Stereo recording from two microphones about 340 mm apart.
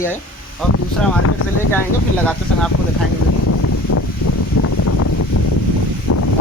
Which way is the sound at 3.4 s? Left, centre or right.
Left.